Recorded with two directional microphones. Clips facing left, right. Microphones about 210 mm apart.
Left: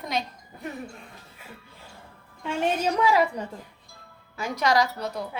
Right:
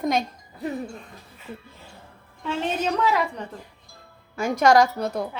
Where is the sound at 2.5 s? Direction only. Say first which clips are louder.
Even; 10° left (ahead or behind).